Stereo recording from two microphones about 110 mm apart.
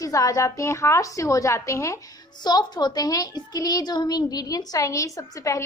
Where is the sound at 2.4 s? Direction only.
40° left (ahead or behind).